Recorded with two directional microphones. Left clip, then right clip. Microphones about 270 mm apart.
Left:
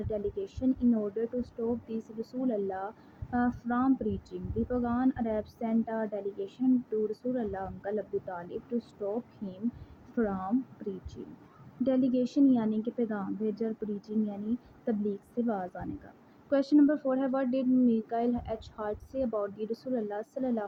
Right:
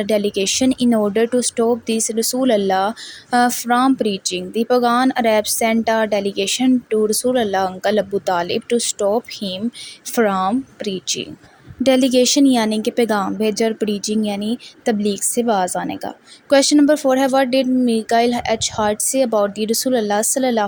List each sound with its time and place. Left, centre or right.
0.1 s speech: right
7.5 s speech: right
10.2 s speech: right
15.6 s speech: right
16.5 s speech: right